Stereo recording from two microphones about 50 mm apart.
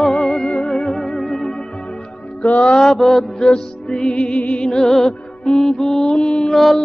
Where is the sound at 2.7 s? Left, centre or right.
Centre; by 4.6 s left.